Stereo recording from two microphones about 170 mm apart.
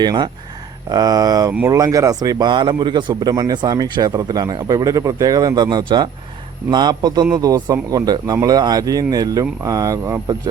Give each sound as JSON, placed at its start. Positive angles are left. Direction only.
{"t": 0.0, "sound": "a man's voice", "side_deg": -25}